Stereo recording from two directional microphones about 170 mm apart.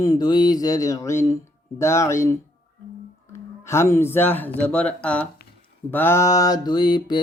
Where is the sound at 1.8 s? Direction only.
15° left (ahead or behind).